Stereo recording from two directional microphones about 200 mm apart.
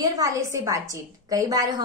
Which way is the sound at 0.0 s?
15° right (ahead or behind).